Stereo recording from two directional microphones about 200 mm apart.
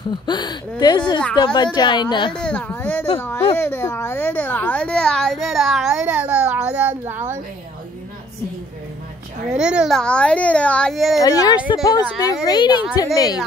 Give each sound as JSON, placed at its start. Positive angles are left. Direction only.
{"t": 0.3, "sound": "speech", "side_deg": 20}
{"t": 2.3, "sound": "a child's voice", "side_deg": 5}
{"t": 3.5, "sound": "a sound", "side_deg": 10}
{"t": 9.5, "sound": "a child's voice", "side_deg": -5}
{"t": 11.2, "sound": "speech", "side_deg": 15}